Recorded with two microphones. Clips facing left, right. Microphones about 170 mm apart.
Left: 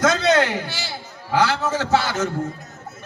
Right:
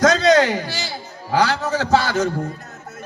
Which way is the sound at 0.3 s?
40° right (ahead or behind).